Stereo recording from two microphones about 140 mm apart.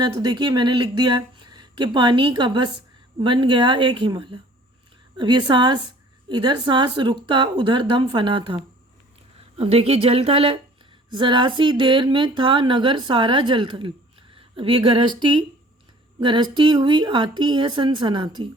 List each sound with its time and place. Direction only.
0.0 s speech: 30° right (ahead or behind)